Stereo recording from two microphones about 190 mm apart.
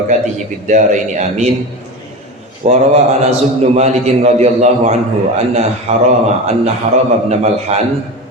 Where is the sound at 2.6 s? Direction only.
35° right (ahead or behind).